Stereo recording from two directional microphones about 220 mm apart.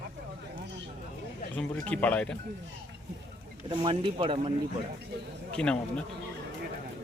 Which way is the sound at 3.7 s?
20° right (ahead or behind).